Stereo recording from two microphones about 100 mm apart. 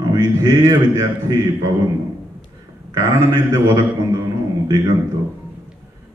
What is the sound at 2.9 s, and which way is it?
A man's voice, 40° right (ahead or behind).